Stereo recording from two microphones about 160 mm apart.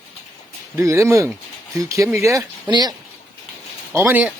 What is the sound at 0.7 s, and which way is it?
Speech, 20° right (ahead or behind).